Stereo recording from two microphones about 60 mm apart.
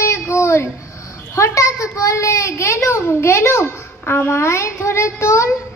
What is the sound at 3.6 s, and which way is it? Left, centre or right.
A child's voice, left.